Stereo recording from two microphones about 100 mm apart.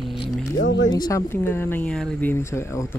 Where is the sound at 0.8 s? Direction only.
45° left (ahead or behind).